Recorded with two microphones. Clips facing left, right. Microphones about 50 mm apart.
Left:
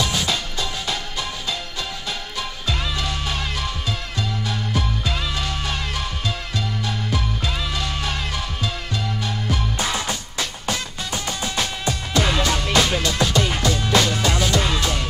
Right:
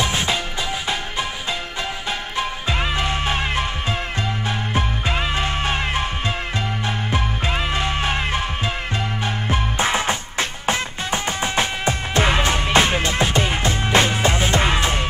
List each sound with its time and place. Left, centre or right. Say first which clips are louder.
0.0 s music: right 2 dB; right
2.3 s music: right 5 dB; right